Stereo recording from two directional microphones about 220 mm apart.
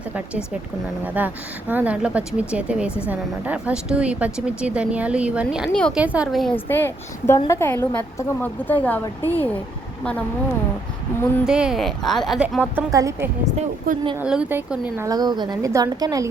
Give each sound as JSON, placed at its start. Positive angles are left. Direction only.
{"t": 1.0, "sound": "a woman's voice", "side_deg": -5}
{"t": 11.4, "sound": "a woman's voice", "side_deg": -5}
{"t": 13.9, "sound": "speech", "side_deg": -40}
{"t": 14.2, "sound": "a woman's voice", "side_deg": -5}